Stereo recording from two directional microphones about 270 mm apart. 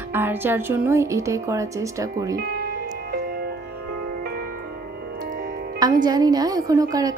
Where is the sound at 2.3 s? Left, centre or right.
Right.